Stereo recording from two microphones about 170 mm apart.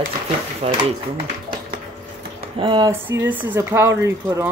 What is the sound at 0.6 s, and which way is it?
Speech, 35° right (ahead or behind).